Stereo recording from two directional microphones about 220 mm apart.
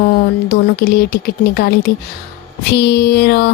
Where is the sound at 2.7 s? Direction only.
50° left (ahead or behind).